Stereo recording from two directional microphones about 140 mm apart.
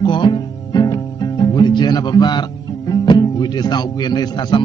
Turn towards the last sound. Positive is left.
turn(degrees=30)  # may be behind; listen again after turning